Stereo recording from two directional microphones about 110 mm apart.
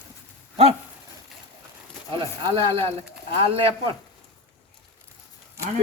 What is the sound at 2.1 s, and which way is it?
Speech, 45° right (ahead or behind).